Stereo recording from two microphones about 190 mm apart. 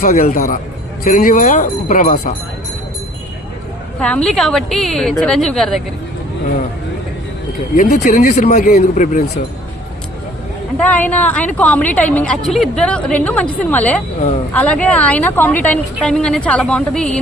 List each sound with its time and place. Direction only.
0.0 s a man's voice: 50° left (ahead or behind)
4.0 s a woman's voice: 5° left (ahead or behind)
7.8 s speech: 40° left (ahead or behind)
10.8 s a woman's voice: 10° left (ahead or behind)